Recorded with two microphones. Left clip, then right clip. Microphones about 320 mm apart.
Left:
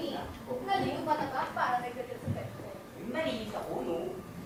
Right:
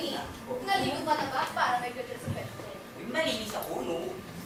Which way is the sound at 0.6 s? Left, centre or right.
Centre.